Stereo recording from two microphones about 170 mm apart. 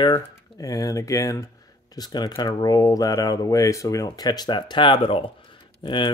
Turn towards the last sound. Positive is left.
turn(degrees=25)  # may be behind; listen again after turning